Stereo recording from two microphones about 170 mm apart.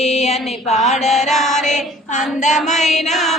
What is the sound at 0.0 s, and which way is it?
Mantra, 40° left (ahead or behind).